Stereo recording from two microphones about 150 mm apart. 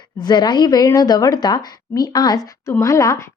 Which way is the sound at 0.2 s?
25° left (ahead or behind).